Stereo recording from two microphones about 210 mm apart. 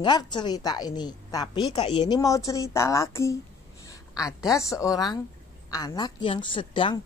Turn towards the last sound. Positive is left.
turn(degrees=25)  # may be behind; listen again after turning